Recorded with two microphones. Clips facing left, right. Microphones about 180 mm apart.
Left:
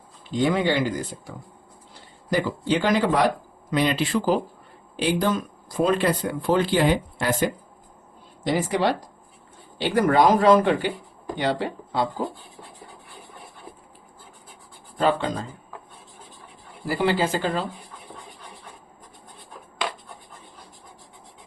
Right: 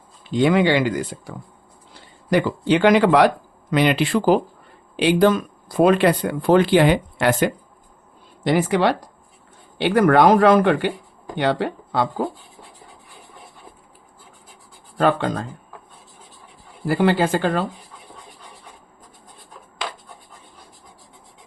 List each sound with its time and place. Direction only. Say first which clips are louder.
0.3 s speech: right 5 dB; 70° right (ahead or behind)
2.3 s speech: right 5 dB; 70° right (ahead or behind)
14.9 s speech: right 3 dB; 60° right (ahead or behind)
16.8 s speech: right 4 dB; 55° right (ahead or behind)